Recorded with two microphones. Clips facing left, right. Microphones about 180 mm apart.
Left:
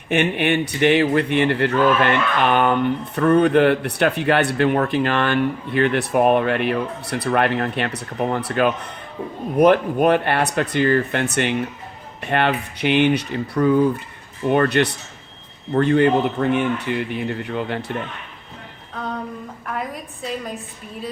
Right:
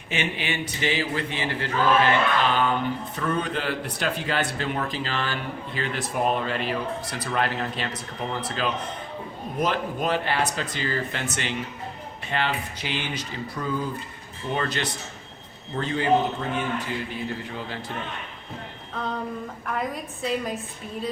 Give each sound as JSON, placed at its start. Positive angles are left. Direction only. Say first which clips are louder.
{"t": 0.1, "sound": "a man's voice", "louder": "left 10 dB", "side_deg": 60}
{"t": 19.6, "sound": "a woman's voice", "louder": "left 1 dB", "side_deg": 0}